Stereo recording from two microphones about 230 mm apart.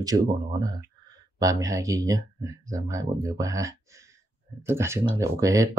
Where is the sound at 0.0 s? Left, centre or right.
Centre.